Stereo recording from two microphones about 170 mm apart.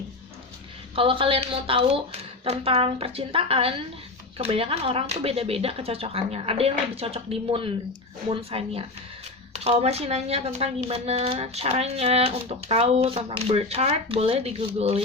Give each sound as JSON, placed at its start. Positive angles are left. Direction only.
{"t": 0.9, "sound": "speech", "side_deg": -30}